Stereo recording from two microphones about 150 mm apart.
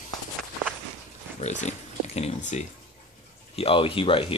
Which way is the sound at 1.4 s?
50° left (ahead or behind).